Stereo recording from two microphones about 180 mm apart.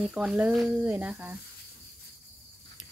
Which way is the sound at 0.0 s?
5° right (ahead or behind).